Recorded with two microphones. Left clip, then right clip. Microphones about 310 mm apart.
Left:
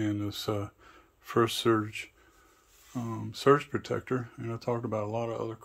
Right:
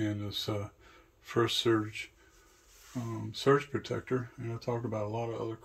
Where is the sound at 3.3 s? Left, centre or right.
Centre.